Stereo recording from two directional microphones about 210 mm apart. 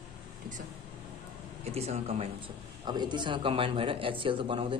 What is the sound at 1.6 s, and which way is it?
A man's voice, 30° right (ahead or behind).